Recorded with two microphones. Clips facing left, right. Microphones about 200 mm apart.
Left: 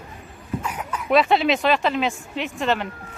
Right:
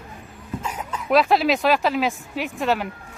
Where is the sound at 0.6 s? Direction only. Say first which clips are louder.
Even; 25° right (ahead or behind).